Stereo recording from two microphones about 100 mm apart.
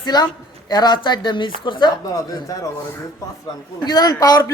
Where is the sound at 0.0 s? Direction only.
45° left (ahead or behind).